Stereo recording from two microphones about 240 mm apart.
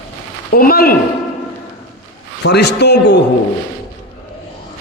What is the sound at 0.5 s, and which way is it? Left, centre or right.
Speech, left.